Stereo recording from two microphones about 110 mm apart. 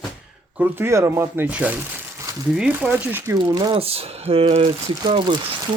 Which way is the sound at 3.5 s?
45° right (ahead or behind).